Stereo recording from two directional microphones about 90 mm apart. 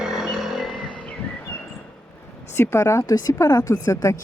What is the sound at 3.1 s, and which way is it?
Speech, 45° left (ahead or behind).